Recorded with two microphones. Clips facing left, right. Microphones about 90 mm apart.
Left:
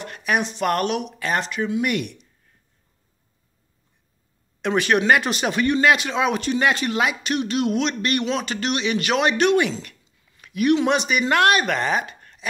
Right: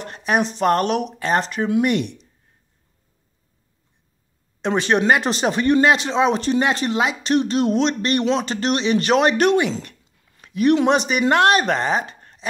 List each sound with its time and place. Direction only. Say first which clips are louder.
0.0 s speech: right 3 dB; 30° right (ahead or behind)
4.6 s speech: right 1 dB; 25° right (ahead or behind)
9.8 s a sound: right 4 dB; 35° right (ahead or behind)
10.8 s speech: right 3 dB; 35° right (ahead or behind)